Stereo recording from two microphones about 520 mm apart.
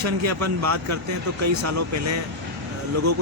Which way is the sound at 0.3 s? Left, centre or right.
Right.